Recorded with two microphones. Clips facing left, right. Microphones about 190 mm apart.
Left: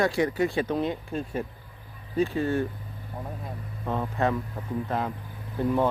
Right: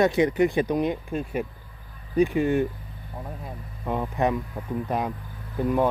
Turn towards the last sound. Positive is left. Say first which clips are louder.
# right 1 dB
turn(degrees=-15)  # may be behind; listen again after turning